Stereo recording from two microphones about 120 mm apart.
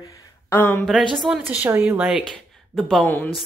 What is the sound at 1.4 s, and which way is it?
Speech, 15° right (ahead or behind).